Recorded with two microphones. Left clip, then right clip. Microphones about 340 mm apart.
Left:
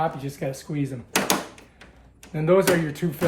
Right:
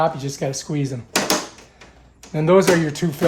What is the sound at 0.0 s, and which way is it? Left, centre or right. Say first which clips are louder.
Speech: right 6 dB; right.